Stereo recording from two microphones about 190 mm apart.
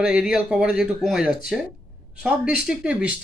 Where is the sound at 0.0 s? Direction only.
5° right (ahead or behind).